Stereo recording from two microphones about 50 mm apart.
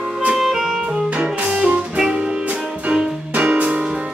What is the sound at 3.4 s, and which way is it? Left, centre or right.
Music, right.